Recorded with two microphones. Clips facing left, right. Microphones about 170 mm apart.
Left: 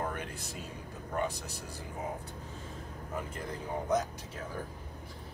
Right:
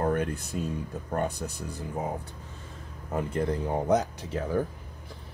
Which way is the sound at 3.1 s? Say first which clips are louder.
Right 11 dB; 65° right (ahead or behind).